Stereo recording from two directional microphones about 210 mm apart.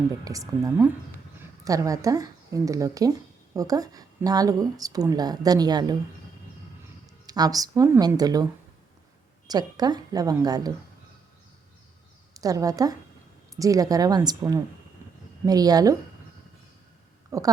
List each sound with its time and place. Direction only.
0.3 s speech: 15° right (ahead or behind)
7.3 s speech: 20° right (ahead or behind)
9.5 s speech: 20° right (ahead or behind)
12.3 s a woman's voice: 15° right (ahead or behind)
17.3 s speech: 15° right (ahead or behind)